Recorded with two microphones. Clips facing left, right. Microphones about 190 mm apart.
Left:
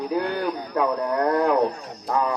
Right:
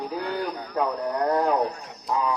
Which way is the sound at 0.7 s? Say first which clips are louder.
Left 2 dB; 55° left (ahead or behind).